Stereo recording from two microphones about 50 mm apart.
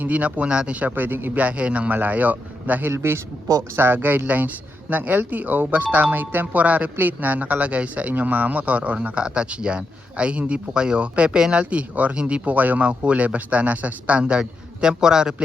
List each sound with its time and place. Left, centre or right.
0.0 s speech: right
2.9 s a man's voice: right
3.8 s speech: right
9.1 s speech: centre
11.6 s speech: right
12.5 s speech: right; by 15.4 s centre